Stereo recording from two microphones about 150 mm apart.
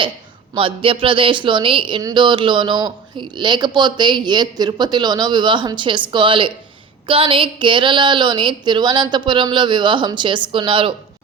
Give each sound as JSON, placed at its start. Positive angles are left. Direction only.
{"t": 0.5, "sound": "speech", "side_deg": -35}